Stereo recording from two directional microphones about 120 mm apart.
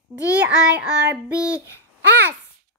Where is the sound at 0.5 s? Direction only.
5° right (ahead or behind).